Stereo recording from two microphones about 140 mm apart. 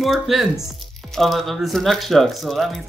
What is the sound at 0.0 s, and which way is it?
Speech, centre (ahead or behind).